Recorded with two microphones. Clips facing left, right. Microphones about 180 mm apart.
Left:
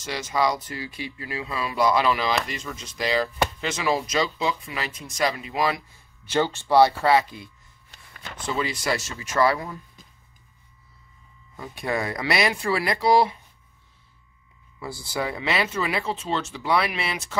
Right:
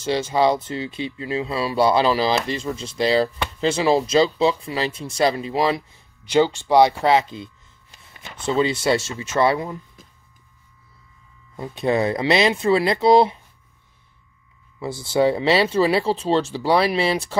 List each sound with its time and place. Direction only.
0.0 s speech: 30° right (ahead or behind)
6.2 s speech: 15° right (ahead or behind)
11.5 s speech: 25° right (ahead or behind)
14.8 s speech: 25° right (ahead or behind)